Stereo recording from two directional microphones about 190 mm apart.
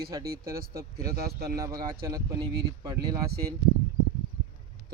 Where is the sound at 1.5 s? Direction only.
20° right (ahead or behind).